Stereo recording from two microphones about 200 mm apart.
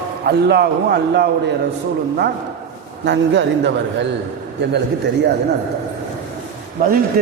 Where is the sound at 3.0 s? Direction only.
60° right (ahead or behind).